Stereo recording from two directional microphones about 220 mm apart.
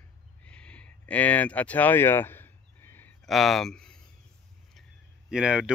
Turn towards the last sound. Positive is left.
turn(degrees=-5)  # may be behind; listen again after turning